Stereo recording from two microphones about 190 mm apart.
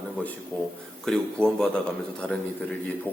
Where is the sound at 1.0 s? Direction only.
5° left (ahead or behind).